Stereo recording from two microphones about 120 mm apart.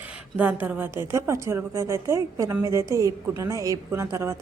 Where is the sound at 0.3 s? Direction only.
15° right (ahead or behind).